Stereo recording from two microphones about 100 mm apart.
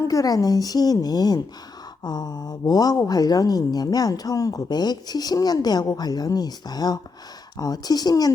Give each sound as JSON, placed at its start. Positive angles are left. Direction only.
{"t": 0.1, "sound": "speech", "side_deg": 35}